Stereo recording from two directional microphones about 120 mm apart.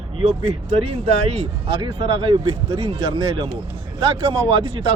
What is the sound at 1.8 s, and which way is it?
Speech, 45° right (ahead or behind).